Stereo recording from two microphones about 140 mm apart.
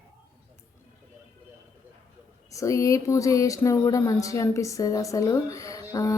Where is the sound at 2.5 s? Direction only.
20° left (ahead or behind).